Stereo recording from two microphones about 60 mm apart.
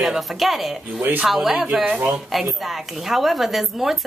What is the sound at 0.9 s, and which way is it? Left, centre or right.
Speech, right.